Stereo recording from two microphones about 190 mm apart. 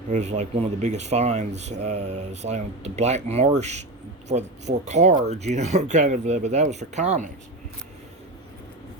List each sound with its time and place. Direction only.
0.1 s speech: 35° right (ahead or behind)